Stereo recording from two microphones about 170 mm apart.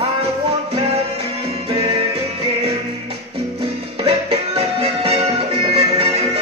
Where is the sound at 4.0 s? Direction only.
35° right (ahead or behind).